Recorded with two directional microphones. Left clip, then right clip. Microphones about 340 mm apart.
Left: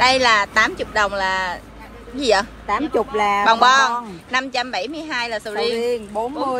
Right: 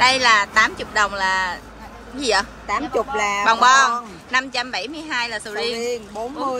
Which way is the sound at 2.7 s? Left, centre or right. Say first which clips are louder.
Left 2 dB; left.